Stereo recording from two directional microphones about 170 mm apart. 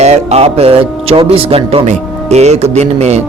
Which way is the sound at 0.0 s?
40° right (ahead or behind).